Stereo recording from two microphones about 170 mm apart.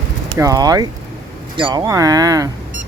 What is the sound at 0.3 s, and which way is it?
Speech, 20° right (ahead or behind).